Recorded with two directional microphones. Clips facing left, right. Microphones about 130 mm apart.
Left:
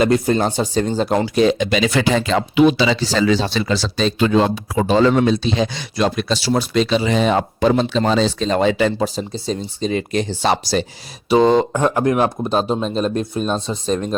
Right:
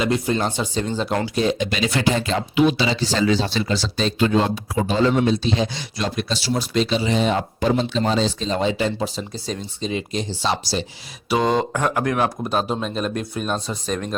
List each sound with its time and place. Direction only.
0.0 s speech: 45° left (ahead or behind)
1.4 s speech: 85° left; by 9.0 s 60° left (ahead or behind)
9.3 s speech: 30° left (ahead or behind)
9.8 s speech: 55° left (ahead or behind)
11.3 s speech: 25° left (ahead or behind)